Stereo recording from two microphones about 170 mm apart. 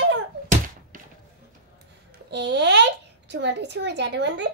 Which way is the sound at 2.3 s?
90° right.